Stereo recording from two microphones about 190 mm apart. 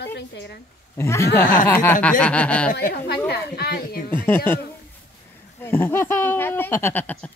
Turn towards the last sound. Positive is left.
turn(degrees=10)  # may be behind; listen again after turning